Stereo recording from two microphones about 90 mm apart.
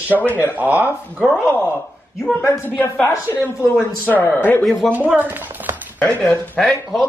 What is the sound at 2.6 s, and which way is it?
A woman's voice, 20° left (ahead or behind).